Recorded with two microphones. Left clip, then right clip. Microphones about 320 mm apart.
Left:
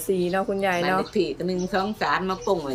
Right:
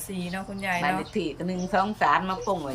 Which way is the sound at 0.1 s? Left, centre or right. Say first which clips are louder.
Left 12 dB; centre.